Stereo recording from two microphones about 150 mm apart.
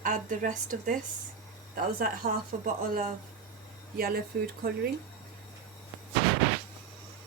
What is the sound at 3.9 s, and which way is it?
Speech, 80° right.